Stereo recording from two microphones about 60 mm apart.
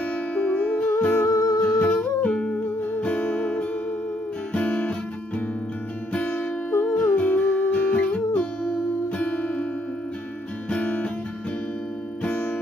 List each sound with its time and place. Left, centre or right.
0.3 s music: left
1.3 s music: left
1.6 s humming: left
2.2 s music: centre
4.5 s guitar: centre
6.2 s music: left
7.2 s music: left
10.7 s guitar: centre
12.2 s music: left